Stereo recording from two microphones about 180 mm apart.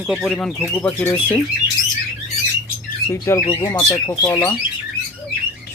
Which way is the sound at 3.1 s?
15° left (ahead or behind).